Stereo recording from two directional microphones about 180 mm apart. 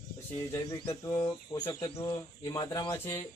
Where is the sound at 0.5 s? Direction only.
15° left (ahead or behind).